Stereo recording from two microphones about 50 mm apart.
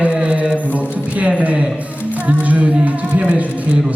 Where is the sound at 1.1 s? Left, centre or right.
Right.